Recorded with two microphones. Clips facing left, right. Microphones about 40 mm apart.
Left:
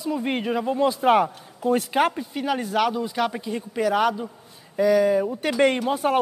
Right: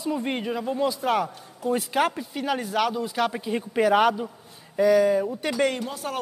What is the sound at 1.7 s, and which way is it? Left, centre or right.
Speech, centre.